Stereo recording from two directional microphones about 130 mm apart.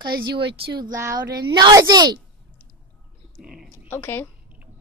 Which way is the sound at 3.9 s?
15° left (ahead or behind).